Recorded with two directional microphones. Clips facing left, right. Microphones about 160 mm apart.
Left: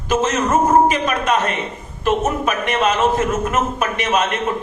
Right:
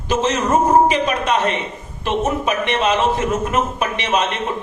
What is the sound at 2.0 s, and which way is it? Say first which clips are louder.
A man's voice: left 1 dB; 45° left (ahead or behind).